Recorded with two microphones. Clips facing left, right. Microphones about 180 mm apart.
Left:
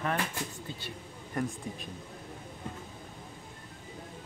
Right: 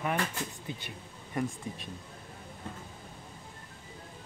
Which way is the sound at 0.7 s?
15° right (ahead or behind).